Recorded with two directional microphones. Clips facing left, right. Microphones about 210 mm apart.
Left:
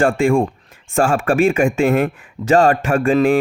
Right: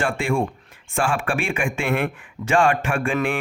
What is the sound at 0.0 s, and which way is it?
Speech, 40° left (ahead or behind).